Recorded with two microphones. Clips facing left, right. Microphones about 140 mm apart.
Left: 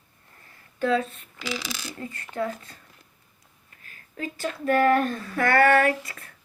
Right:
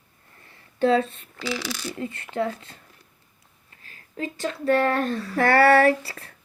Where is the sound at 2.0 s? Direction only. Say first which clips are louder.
Right 2 dB; 25° right (ahead or behind).